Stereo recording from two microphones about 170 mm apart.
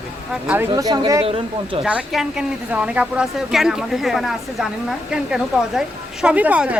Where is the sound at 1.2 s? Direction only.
35° right (ahead or behind).